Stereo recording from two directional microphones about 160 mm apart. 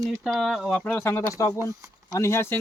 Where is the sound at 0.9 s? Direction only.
15° left (ahead or behind).